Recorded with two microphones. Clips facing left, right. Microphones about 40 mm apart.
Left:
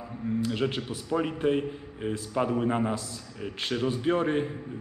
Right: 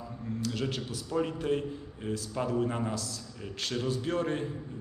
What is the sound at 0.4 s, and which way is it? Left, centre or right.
Speech, left.